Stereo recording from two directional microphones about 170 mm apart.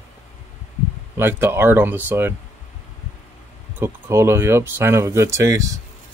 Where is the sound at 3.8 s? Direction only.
15° right (ahead or behind).